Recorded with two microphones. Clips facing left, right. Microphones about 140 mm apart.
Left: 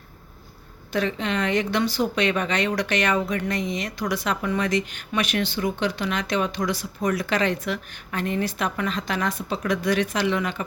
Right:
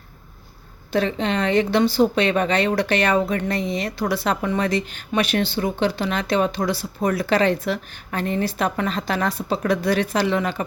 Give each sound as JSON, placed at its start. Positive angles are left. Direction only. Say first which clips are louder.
{"t": 0.9, "sound": "speech", "louder": "right 3 dB", "side_deg": -30}